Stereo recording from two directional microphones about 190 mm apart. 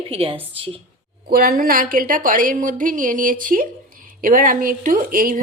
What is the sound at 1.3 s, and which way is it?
Speech, 50° right (ahead or behind).